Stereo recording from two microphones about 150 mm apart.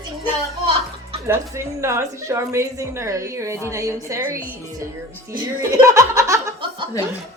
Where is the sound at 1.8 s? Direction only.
20° right (ahead or behind).